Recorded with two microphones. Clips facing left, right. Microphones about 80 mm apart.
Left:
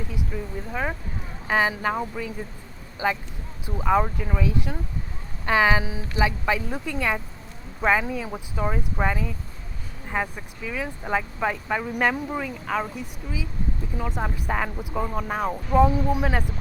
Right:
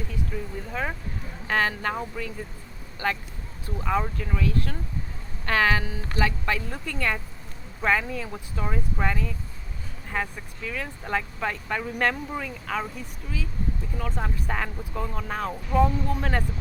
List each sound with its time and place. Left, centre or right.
0.3 s speech: centre